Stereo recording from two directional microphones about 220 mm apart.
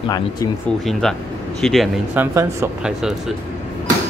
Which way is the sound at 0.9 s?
Centre (ahead or behind).